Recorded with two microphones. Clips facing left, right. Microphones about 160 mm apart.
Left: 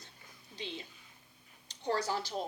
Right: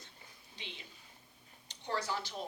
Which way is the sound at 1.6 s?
35° left (ahead or behind).